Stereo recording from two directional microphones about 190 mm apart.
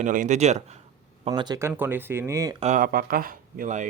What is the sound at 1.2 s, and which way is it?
Speech, 25° right (ahead or behind).